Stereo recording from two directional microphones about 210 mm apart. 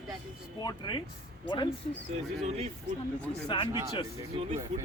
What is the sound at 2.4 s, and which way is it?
Speech, 30° right (ahead or behind).